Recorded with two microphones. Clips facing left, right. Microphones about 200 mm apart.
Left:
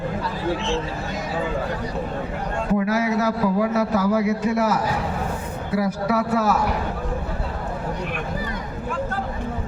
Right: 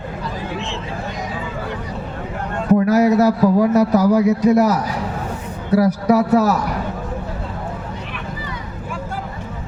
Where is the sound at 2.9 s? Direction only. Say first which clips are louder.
Right 7 dB; 40° right (ahead or behind).